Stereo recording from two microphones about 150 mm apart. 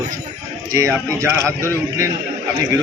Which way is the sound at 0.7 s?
20° right (ahead or behind).